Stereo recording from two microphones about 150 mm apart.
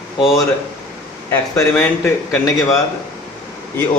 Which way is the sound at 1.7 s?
10° left (ahead or behind).